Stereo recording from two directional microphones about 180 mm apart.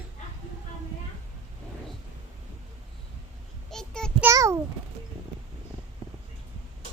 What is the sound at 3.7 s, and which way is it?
Child singing, 5° left (ahead or behind).